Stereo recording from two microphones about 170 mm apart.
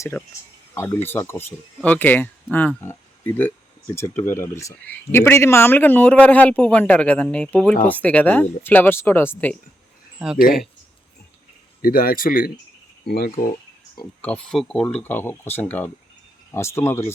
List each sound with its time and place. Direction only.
0.0 s speech: 15° left (ahead or behind)
11.8 s speech: 60° left (ahead or behind)
14.2 s speech: 5° left (ahead or behind)